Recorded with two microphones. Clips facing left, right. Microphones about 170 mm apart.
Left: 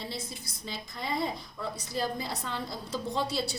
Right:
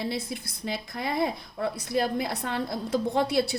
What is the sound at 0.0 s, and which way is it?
A woman's voice, 60° right (ahead or behind).